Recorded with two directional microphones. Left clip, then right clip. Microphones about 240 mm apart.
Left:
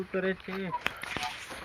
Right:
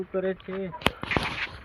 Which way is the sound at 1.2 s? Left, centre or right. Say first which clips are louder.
Right 6 dB; left.